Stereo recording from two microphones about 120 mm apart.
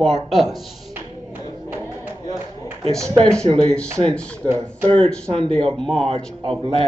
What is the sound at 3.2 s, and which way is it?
Speech, 5° left (ahead or behind).